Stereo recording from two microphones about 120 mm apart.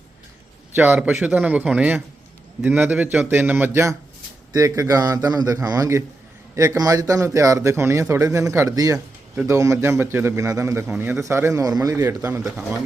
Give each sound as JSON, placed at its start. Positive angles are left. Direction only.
{"t": 0.8, "sound": "a man's voice", "side_deg": -15}